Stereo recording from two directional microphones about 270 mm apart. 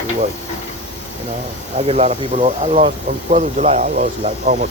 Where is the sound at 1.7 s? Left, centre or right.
Right.